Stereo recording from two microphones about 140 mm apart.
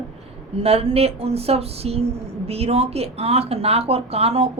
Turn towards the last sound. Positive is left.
turn(degrees=-45)  # may be behind; listen again after turning